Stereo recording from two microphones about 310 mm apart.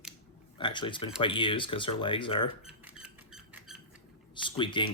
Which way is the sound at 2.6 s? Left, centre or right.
Centre.